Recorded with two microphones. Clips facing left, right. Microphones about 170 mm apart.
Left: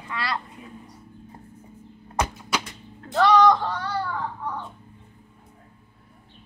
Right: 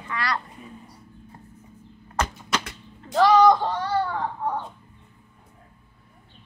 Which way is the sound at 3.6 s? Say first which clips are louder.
Right 3 dB; 25° right (ahead or behind).